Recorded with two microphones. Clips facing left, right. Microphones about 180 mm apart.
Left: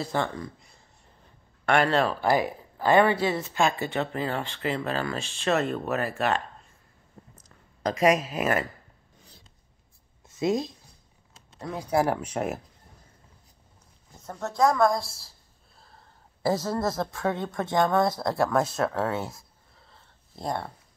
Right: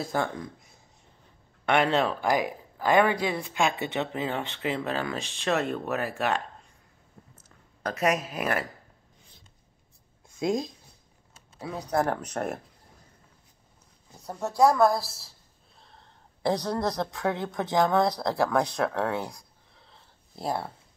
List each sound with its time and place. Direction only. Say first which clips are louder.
0.0 s speech: even; centre (ahead or behind)
2.1 s speech: left 2 dB; 10° right (ahead or behind)
3.5 s speech: even; centre (ahead or behind)
4.6 s speech: left 1 dB; 15° right (ahead or behind)
5.4 s speech: left 2 dB; centre (ahead or behind)
5.9 s speech: left 2 dB; 15° right (ahead or behind)
7.8 s speech: left 4 dB; 10° left (ahead or behind)
10.2 s a sound: left 2 dB; 5° left (ahead or behind)
11.5 s speech: left 2 dB; centre (ahead or behind)
14.1 s speech: right 2 dB; 10° right (ahead or behind)